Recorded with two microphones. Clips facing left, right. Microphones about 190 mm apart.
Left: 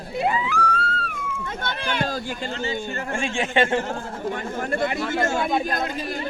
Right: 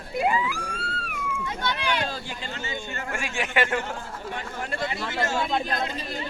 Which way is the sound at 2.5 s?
35° left (ahead or behind).